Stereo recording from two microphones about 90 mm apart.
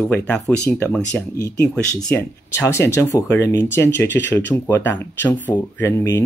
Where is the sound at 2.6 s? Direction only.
35° left (ahead or behind).